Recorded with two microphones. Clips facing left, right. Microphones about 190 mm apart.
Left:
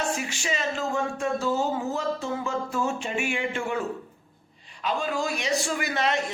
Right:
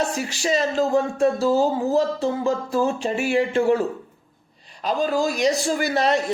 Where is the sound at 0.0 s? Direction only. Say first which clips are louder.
Right 5 dB; 35° right (ahead or behind).